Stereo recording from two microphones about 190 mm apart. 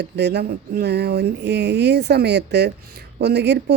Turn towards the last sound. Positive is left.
turn(degrees=-65)  # may be behind; listen again after turning